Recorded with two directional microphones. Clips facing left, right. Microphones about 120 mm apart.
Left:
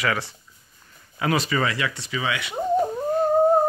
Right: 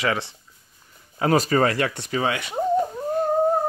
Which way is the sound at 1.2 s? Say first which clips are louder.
Right 4 dB; 40° right (ahead or behind).